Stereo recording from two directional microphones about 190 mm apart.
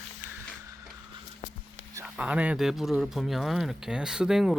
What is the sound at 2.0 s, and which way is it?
Speech, 5° right (ahead or behind).